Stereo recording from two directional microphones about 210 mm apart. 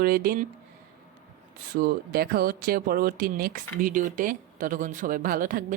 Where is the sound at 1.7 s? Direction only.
45° right (ahead or behind).